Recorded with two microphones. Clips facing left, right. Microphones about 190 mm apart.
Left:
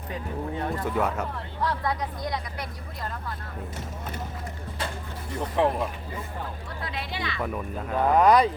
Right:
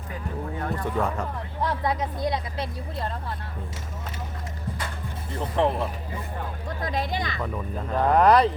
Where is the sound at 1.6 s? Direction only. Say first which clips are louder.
Right 2 dB; 20° right (ahead or behind).